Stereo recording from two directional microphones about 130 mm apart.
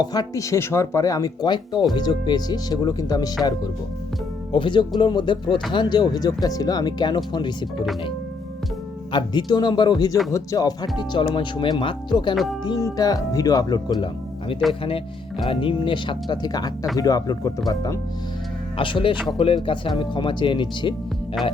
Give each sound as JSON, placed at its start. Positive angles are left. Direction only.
{"t": 0.0, "sound": "speech", "side_deg": 30}
{"t": 4.5, "sound": "speech", "side_deg": 40}
{"t": 9.1, "sound": "speech", "side_deg": 35}
{"t": 12.3, "sound": "speech", "side_deg": 0}
{"t": 12.6, "sound": "speech", "side_deg": 30}
{"t": 18.8, "sound": "speech", "side_deg": 40}